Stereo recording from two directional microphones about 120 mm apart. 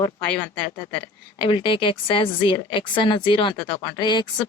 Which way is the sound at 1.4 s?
45° left (ahead or behind).